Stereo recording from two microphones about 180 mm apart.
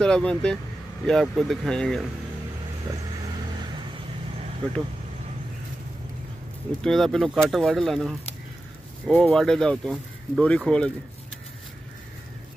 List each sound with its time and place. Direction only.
0.0 s speech: 5° left (ahead or behind)
6.8 s speech: centre (ahead or behind)